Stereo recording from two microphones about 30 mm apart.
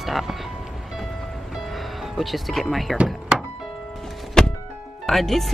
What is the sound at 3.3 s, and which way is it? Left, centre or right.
Music, right.